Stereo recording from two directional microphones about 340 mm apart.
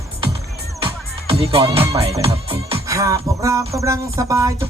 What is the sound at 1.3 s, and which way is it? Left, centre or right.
Speech, centre.